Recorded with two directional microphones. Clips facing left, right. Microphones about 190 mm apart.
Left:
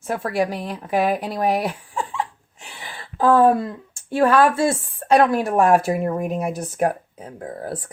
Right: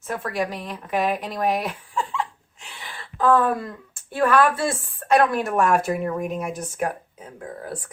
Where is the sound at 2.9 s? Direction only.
35° left (ahead or behind).